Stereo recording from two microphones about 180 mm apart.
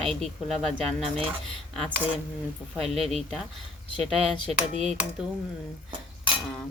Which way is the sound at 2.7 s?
35° right (ahead or behind).